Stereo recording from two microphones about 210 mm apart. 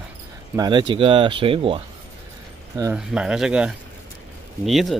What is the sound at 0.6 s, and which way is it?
Speech, 20° right (ahead or behind).